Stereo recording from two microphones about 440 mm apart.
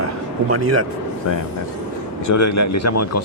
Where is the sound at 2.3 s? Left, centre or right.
Left.